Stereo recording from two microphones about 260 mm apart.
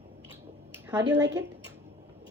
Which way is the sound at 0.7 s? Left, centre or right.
Centre.